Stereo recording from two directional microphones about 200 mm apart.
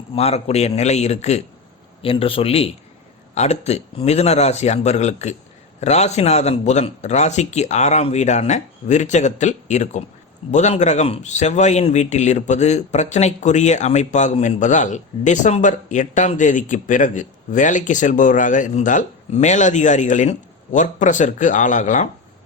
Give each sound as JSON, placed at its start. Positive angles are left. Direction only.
{"t": 0.2, "sound": "a man's voice", "side_deg": 30}